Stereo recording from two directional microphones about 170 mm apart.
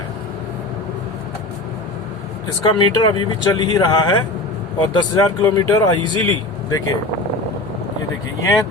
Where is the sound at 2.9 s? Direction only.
25° left (ahead or behind).